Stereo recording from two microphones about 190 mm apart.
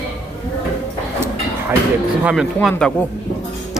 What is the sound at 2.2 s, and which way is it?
Speech, 5° right (ahead or behind).